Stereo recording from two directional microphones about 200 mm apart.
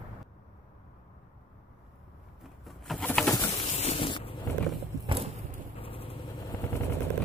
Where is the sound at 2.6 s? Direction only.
Centre (ahead or behind).